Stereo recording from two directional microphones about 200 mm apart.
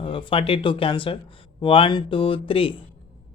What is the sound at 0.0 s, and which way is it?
Speech, 25° left (ahead or behind).